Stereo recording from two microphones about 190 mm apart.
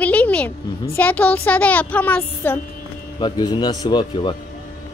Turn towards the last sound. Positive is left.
turn(degrees=25)  # may be behind; listen again after turning